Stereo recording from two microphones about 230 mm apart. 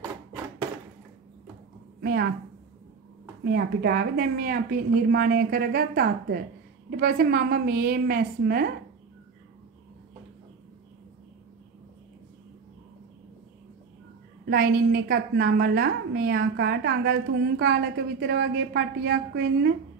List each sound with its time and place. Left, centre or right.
2.0 s a sound: right
3.4 s a woman's voice: right
14.5 s a woman's voice: right